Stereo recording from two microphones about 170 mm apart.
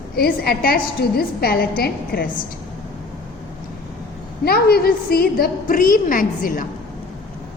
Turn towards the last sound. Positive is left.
turn(degrees=55)  # may be behind; listen again after turning